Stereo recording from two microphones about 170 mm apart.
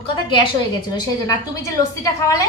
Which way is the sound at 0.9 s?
20° left (ahead or behind).